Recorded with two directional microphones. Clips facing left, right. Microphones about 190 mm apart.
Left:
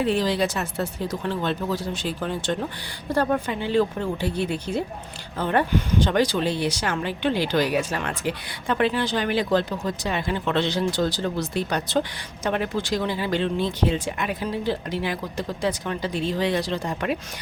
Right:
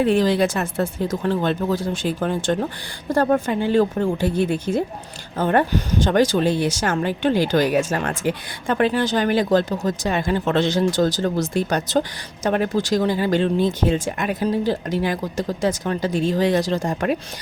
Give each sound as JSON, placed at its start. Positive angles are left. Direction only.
{"t": 0.0, "sound": "speech", "side_deg": -50}